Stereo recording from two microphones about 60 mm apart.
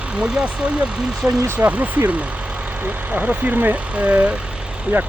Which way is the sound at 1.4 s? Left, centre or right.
Right.